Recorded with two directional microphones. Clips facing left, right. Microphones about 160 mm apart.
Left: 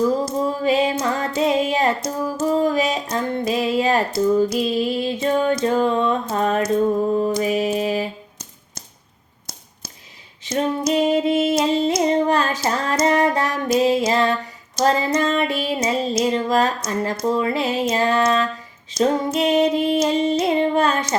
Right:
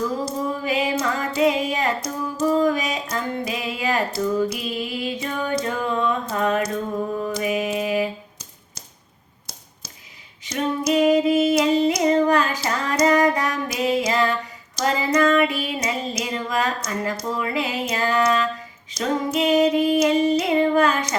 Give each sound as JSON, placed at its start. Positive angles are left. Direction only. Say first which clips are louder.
{"t": 0.6, "sound": "female singing", "louder": "left 4 dB", "side_deg": 30}
{"t": 7.2, "sound": "mantra", "louder": "left 4 dB", "side_deg": 30}
{"t": 10.4, "sound": "female singing", "louder": "left 2 dB", "side_deg": 25}